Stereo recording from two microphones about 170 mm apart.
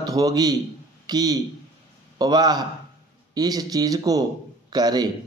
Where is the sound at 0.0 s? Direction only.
20° right (ahead or behind).